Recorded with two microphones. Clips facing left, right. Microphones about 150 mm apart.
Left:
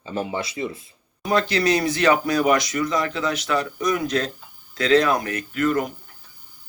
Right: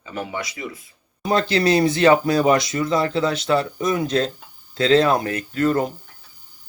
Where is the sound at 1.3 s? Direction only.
30° right (ahead or behind).